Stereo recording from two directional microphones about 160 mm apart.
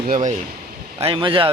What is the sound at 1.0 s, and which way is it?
Speech, 30° right (ahead or behind).